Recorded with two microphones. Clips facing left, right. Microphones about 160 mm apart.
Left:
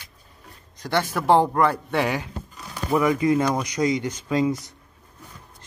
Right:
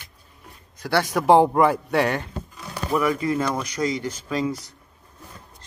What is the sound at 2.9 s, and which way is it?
Speech, 20° left (ahead or behind).